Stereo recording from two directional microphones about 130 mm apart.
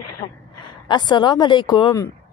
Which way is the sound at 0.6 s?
35° left (ahead or behind).